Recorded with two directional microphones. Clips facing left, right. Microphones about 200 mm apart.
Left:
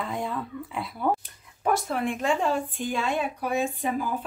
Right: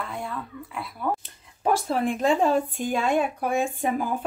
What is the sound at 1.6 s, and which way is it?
A woman's voice, 35° right (ahead or behind).